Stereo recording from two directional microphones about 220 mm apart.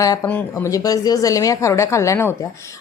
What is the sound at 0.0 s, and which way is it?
Speech, 10° left (ahead or behind).